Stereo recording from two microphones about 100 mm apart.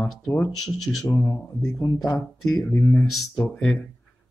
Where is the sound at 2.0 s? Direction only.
40° left (ahead or behind).